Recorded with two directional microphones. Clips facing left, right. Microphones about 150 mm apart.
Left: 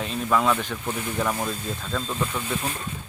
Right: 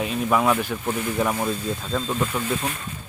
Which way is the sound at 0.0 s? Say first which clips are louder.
Right 2 dB; 10° right (ahead or behind).